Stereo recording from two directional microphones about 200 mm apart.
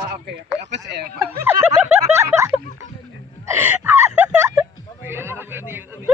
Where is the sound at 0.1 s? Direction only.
60° right (ahead or behind).